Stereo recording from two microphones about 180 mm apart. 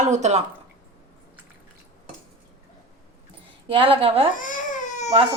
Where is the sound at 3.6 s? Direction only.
30° right (ahead or behind).